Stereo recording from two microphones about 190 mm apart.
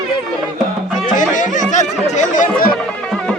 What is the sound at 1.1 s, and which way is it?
Music, 40° left (ahead or behind).